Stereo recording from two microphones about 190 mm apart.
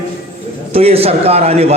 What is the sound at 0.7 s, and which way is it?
A woman's voice, 30° right (ahead or behind).